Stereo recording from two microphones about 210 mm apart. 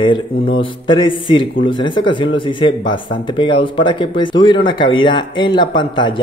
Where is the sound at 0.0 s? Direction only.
25° left (ahead or behind).